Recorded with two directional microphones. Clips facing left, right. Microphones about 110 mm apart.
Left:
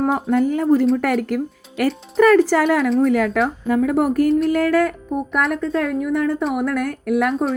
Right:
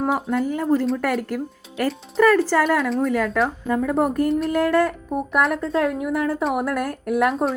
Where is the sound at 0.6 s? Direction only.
15° left (ahead or behind).